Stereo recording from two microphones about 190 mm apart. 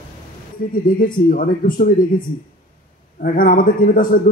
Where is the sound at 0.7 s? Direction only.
45° left (ahead or behind).